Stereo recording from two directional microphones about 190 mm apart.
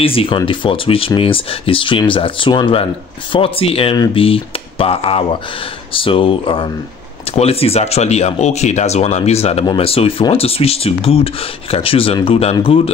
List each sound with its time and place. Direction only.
0.0 s speech: 30° left (ahead or behind)